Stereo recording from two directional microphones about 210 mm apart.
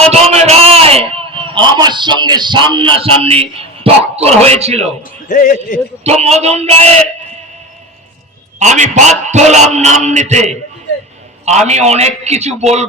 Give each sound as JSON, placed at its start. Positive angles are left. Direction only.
{"t": 0.1, "sound": "a man's voice", "side_deg": -30}
{"t": 5.3, "sound": "a man's voice", "side_deg": 35}
{"t": 6.0, "sound": "a man's voice", "side_deg": -30}
{"t": 8.5, "sound": "a man's voice", "side_deg": -35}
{"t": 11.4, "sound": "a man's voice", "side_deg": -35}